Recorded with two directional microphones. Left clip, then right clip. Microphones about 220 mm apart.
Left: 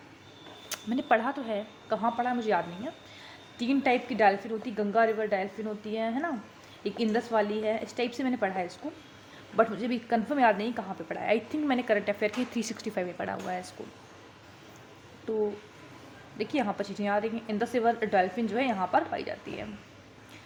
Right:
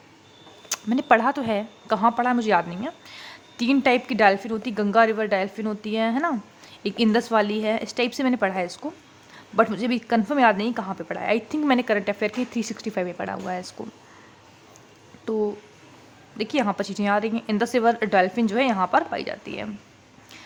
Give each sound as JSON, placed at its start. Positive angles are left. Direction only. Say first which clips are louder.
{"t": 0.7, "sound": "speech", "louder": "right 7 dB", "side_deg": -25}
{"t": 15.3, "sound": "speech", "louder": "right 5 dB", "side_deg": -25}